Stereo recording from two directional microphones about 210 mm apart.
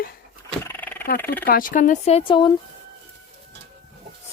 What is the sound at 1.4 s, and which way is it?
Speech, 40° left (ahead or behind).